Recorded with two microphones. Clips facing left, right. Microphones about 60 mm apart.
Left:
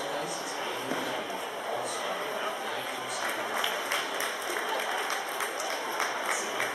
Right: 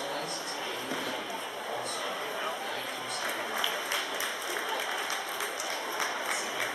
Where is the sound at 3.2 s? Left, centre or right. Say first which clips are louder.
Left 1 dB; centre.